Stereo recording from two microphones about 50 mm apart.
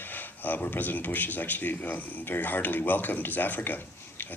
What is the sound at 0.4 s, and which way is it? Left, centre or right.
Speech, left.